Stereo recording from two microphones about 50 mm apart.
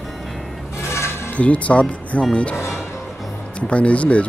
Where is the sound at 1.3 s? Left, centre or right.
Left.